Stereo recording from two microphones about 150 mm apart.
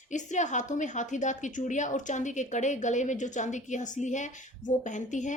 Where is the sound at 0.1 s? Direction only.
55° left (ahead or behind).